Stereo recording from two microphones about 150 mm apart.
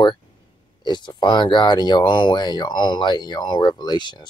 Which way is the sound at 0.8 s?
30° left (ahead or behind).